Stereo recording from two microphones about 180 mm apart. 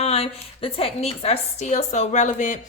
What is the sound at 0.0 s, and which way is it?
A woman's voice, 35° left (ahead or behind).